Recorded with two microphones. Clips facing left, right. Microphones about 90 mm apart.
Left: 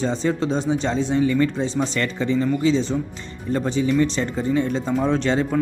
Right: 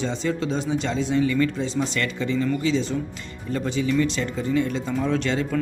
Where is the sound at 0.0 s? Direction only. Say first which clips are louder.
Left 3 dB; 35° left (ahead or behind).